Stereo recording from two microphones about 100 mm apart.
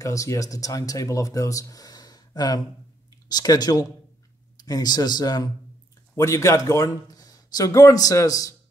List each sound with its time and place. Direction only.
0.0 s speech: 35° left (ahead or behind)